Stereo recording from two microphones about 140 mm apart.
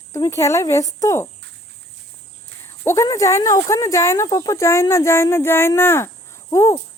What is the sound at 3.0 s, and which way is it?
Speech, 25° left (ahead or behind).